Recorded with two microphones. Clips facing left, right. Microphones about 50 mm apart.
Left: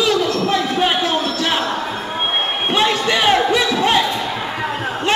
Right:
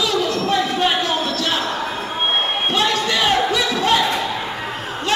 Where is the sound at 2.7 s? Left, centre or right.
Left.